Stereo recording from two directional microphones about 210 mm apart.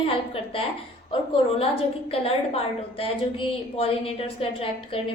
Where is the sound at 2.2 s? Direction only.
30° left (ahead or behind).